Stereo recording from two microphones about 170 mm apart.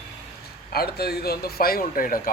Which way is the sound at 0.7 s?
65° left (ahead or behind).